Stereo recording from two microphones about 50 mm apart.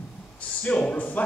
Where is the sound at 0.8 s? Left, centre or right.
Left.